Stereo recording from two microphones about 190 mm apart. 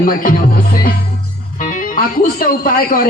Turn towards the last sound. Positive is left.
turn(degrees=50)  # may be behind; listen again after turning